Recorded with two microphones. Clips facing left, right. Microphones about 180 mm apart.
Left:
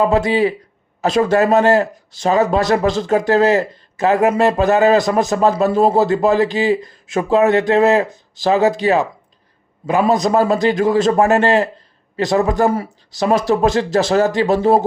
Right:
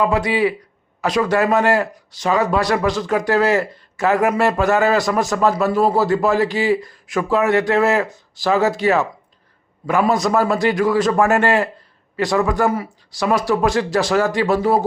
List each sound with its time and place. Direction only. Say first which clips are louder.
0.0 s a man's voice: left 3 dB; 30° left (ahead or behind)